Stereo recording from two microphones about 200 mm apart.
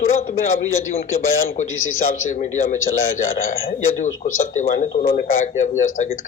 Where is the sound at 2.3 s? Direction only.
35° left (ahead or behind).